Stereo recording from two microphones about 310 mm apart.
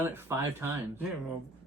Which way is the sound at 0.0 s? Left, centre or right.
Centre.